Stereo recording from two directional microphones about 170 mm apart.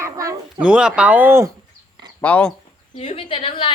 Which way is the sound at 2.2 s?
10° left (ahead or behind).